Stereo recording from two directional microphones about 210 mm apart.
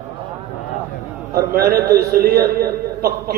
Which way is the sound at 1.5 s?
45° right (ahead or behind).